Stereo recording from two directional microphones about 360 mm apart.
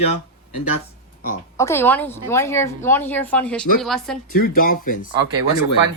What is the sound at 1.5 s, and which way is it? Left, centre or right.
A woman's voice, centre.